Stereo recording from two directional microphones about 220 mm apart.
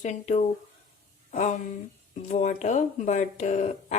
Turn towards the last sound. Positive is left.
turn(degrees=30)  # may be behind; listen again after turning